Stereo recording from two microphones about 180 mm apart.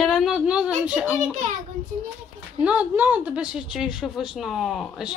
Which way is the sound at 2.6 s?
10° right (ahead or behind).